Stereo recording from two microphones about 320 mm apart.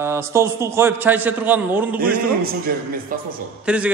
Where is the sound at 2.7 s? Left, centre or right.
Right.